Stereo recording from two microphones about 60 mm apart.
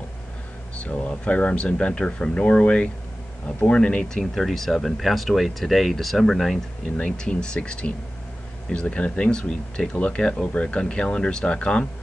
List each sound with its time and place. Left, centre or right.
0.7 s speech: left
4.4 s speech: centre
7.0 s speech: centre